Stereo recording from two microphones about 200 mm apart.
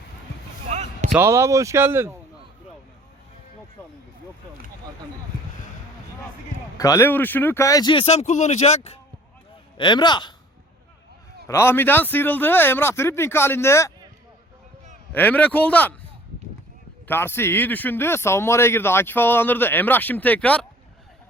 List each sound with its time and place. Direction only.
0.7 s basketball bounce: 35° right (ahead or behind)
1.1 s speech: 15° right (ahead or behind)
6.7 s speech: 15° left (ahead or behind)
11.4 s speech: 15° left (ahead or behind)
15.1 s speech: 10° left (ahead or behind)
17.1 s speech: 10° left (ahead or behind)